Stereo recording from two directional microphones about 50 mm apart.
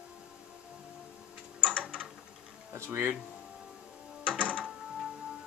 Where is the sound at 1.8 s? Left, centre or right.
Centre.